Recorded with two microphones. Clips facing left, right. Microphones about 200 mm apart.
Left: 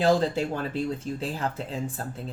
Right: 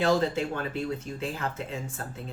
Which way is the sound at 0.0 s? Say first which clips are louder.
Left 2 dB; 35° left (ahead or behind).